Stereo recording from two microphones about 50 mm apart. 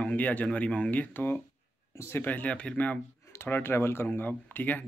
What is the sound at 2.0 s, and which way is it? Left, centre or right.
Speech, left.